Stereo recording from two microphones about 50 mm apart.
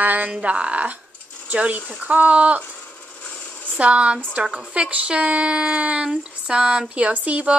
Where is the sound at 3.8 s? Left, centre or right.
Right.